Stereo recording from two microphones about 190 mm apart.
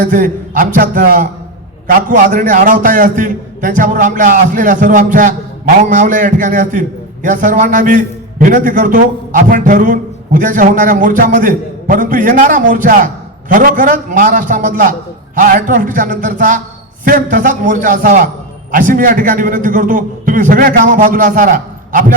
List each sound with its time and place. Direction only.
0.0 s a man's voice: 45° right (ahead or behind)